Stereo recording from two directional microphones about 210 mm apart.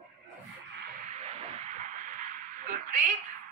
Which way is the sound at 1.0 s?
30° right (ahead or behind).